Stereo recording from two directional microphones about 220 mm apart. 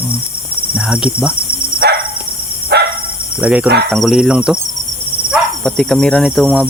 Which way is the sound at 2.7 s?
50° right (ahead or behind).